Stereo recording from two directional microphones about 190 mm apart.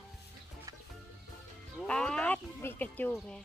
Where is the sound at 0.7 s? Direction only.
15° right (ahead or behind).